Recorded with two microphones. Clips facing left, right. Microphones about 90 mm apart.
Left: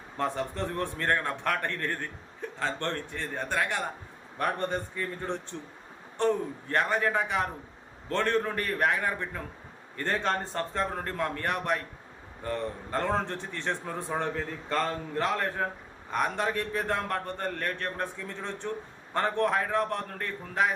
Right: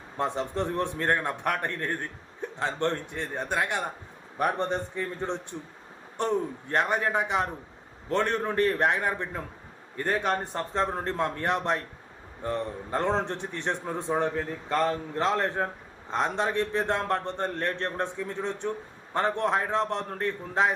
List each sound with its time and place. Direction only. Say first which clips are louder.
0.2 s a man's voice: right 2 dB; 20° right (ahead or behind)